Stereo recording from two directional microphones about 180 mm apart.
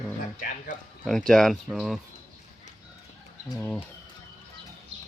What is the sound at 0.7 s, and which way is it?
Speech, 45° left (ahead or behind).